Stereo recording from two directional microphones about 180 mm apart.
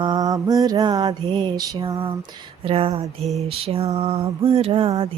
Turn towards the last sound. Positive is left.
turn(degrees=-30)  # may be behind; listen again after turning